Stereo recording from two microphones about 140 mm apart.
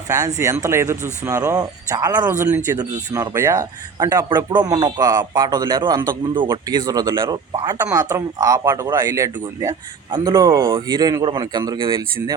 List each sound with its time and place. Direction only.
0.1 s speech: 25° right (ahead or behind)